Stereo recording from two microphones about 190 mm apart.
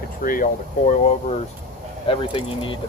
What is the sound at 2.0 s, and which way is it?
Speech, 30° left (ahead or behind).